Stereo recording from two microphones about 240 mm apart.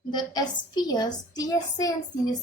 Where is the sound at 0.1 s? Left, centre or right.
Centre.